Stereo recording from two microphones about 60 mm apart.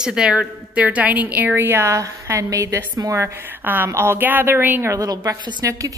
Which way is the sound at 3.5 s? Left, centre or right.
Right.